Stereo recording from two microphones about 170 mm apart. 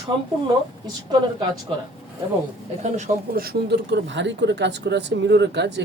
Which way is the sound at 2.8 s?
45° right (ahead or behind).